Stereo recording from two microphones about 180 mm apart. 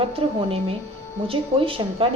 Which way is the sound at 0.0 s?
30° right (ahead or behind).